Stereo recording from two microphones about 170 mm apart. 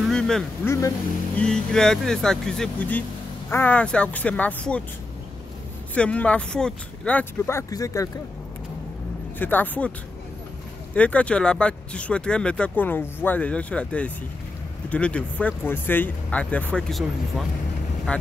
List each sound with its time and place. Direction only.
0.0 s vehicle: 5° left (ahead or behind)
0.7 s speech: 15° left (ahead or behind)
1.4 s speech: 5° left (ahead or behind)
5.9 s speech: 5° left (ahead or behind)
9.4 s speech: 10° left (ahead or behind)
11.0 s speech: 10° left (ahead or behind)